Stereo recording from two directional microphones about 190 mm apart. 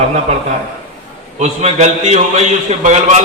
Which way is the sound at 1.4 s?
35° right (ahead or behind).